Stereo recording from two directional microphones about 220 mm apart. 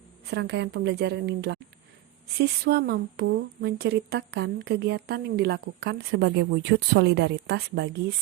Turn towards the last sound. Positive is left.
turn(degrees=-50)  # may be behind; listen again after turning